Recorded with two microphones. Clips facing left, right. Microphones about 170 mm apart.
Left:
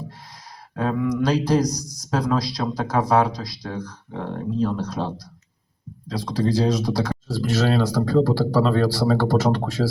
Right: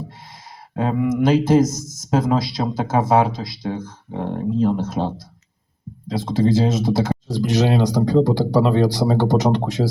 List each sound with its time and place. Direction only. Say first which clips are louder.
0.7 s speech: right 2 dB; 25° right (ahead or behind)